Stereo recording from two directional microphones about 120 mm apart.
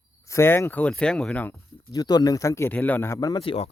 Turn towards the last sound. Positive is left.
turn(degrees=55)  # may be behind; listen again after turning